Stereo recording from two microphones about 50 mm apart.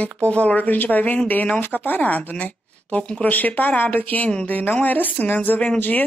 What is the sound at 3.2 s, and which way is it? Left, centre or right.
Speech, left.